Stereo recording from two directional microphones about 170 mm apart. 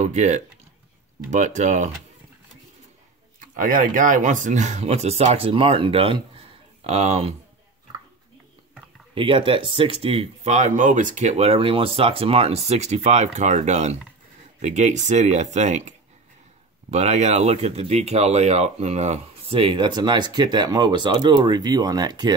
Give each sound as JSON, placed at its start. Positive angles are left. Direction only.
{"t": 0.0, "sound": "speech", "side_deg": -45}
{"t": 3.3, "sound": "speech", "side_deg": -50}
{"t": 9.1, "sound": "speech", "side_deg": -30}
{"t": 16.9, "sound": "speech", "side_deg": -40}